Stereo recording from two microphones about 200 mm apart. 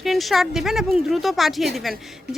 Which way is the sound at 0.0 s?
Centre (ahead or behind).